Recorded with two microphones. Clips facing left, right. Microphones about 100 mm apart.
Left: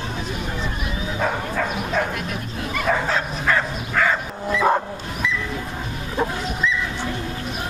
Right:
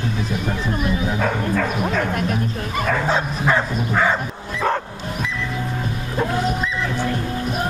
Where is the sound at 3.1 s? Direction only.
20° right (ahead or behind).